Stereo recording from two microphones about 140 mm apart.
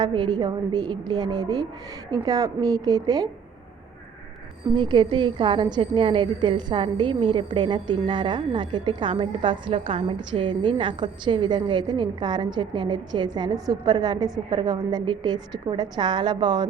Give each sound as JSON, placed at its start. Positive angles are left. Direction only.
{"t": 0.0, "sound": "a woman's voice", "side_deg": -35}
{"t": 4.7, "sound": "a woman's voice", "side_deg": -35}